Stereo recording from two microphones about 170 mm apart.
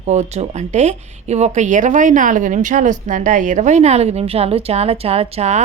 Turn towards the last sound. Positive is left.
turn(degrees=-40)  # may be behind; listen again after turning